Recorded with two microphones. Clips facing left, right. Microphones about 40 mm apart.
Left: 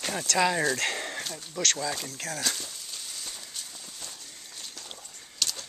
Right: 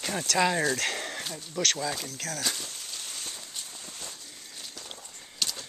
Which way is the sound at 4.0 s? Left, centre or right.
Centre.